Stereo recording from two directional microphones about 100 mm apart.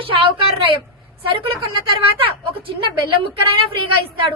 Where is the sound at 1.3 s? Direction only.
60° right (ahead or behind).